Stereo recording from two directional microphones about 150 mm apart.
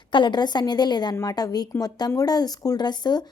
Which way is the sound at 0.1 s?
30° left (ahead or behind).